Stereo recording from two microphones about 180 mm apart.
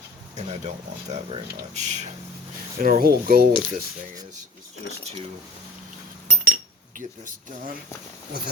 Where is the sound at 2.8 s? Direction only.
55° right (ahead or behind).